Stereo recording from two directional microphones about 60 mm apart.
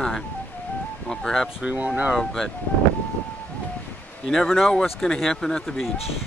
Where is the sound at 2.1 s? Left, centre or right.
Centre.